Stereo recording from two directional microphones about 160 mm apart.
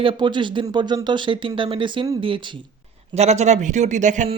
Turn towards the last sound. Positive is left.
turn(degrees=-50)  # may be behind; listen again after turning